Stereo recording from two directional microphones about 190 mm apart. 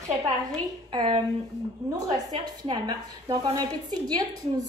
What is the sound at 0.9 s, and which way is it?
Speech, 30° right (ahead or behind).